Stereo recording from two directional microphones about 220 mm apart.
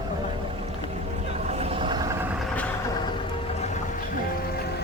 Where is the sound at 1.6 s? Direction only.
25° right (ahead or behind).